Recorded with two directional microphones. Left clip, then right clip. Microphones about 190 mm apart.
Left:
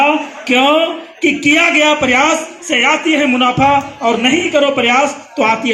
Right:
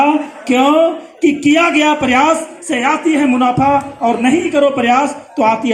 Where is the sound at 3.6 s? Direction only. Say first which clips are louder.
Left 1 dB; 40° right (ahead or behind); by 5.7 s 65° right (ahead or behind).